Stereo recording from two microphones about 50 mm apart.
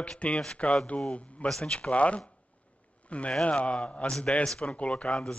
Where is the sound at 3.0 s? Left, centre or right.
Left.